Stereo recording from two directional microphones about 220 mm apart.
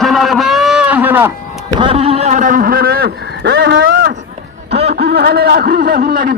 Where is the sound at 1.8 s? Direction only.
25° right (ahead or behind).